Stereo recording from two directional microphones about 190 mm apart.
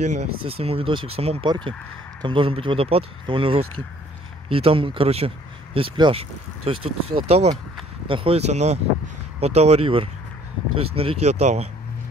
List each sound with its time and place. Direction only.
0.0 s speech: 35° right (ahead or behind)